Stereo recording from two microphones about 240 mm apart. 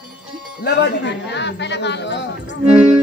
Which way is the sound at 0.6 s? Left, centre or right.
Left.